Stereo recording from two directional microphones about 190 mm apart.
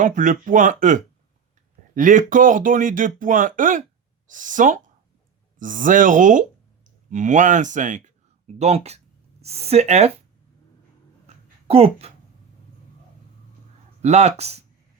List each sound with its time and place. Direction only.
0.0 s speech: 45° right (ahead or behind)
11.3 s a sound: 30° right (ahead or behind)
14.0 s speech: 35° right (ahead or behind)